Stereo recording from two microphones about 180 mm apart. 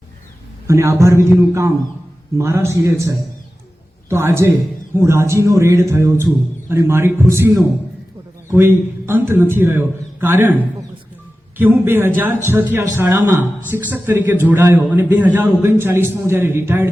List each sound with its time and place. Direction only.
0.7 s a man's voice: 15° right (ahead or behind)